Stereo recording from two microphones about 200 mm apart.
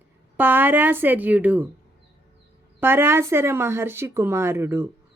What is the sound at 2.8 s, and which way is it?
Speech, 10° right (ahead or behind).